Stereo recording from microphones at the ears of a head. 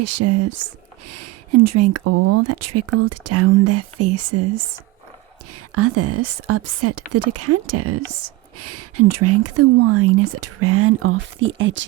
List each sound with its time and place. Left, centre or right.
0.0 s speech: right